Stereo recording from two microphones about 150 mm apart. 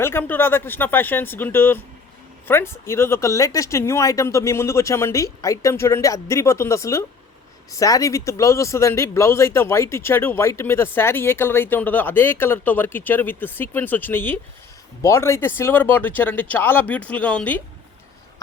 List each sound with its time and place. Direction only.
0.0 s speech: 15° left (ahead or behind)